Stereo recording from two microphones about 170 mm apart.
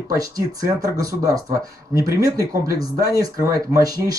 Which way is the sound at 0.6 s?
20° right (ahead or behind).